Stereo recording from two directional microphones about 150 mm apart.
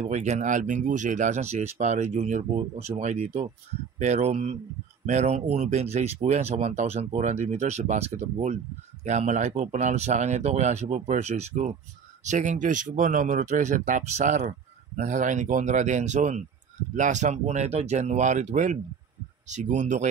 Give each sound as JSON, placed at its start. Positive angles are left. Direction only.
{"t": 0.0, "sound": "speech", "side_deg": -50}